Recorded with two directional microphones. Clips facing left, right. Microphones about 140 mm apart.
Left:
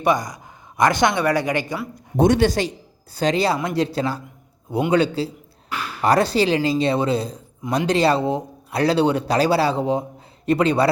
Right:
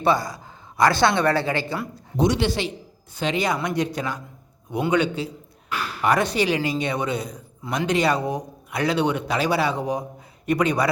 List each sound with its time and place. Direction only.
0.0 s a woman's voice: 15° left (ahead or behind)
2.1 s speech: 50° left (ahead or behind); by 10.8 s 30° left (ahead or behind)